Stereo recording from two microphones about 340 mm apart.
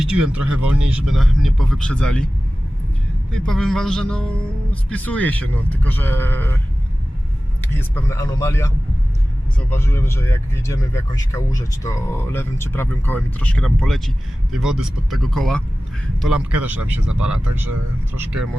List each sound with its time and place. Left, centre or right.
0.0 s speech: centre
3.4 s speech: centre
7.6 s speech: centre
17.1 s speech: right
17.5 s speech: centre